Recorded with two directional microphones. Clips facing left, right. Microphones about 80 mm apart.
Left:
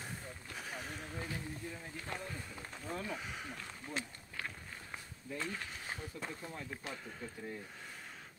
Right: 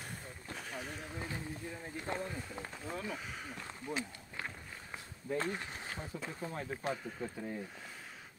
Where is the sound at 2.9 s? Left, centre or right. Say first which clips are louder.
Left 1 dB; centre.